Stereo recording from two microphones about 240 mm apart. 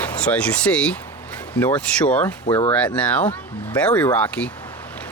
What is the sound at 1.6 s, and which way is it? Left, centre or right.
Speech, centre.